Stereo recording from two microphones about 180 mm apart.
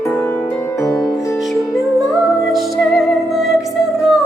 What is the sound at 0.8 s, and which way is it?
Music, 15° left (ahead or behind).